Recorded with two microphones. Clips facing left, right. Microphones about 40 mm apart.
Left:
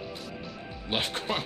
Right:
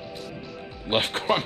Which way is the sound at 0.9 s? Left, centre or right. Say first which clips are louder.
Right 6 dB; right.